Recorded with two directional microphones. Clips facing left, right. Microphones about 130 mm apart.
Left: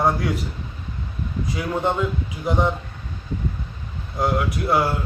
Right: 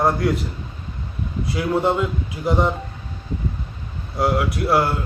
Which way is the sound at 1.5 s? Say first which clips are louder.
Right 4 dB; 5° right (ahead or behind).